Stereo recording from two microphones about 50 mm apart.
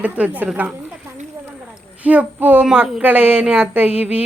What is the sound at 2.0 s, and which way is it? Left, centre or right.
Child singing, right.